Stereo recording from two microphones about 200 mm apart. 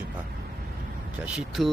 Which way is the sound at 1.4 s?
Centre (ahead or behind).